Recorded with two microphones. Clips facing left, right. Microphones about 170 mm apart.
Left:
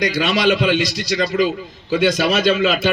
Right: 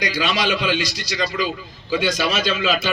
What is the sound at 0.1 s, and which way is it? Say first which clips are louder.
A man's voice: left 5 dB; 60° left (ahead or behind).